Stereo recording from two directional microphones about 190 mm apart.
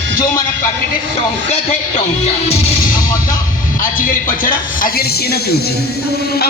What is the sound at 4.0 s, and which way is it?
Speech, 45° left (ahead or behind).